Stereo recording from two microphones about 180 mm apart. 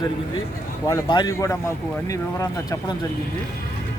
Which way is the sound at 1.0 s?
25° left (ahead or behind).